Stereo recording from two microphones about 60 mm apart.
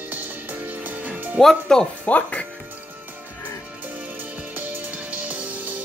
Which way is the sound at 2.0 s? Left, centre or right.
Left.